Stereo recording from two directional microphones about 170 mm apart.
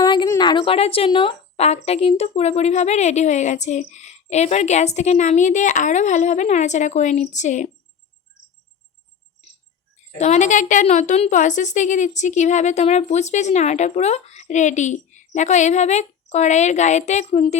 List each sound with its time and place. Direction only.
0.0 s speech: 25° left (ahead or behind); by 7.7 s 45° left (ahead or behind)
10.2 s speech: 45° left (ahead or behind)